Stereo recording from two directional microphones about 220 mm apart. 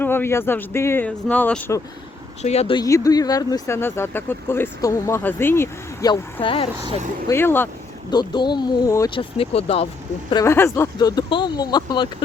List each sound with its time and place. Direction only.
0.0 s speech: 10° left (ahead or behind)
2.4 s speech: 30° left (ahead or behind)
6.7 s speech: 20° right (ahead or behind)
7.3 s speech: 10° left (ahead or behind); by 9.8 s 25° left (ahead or behind)
10.2 s speech: 15° left (ahead or behind)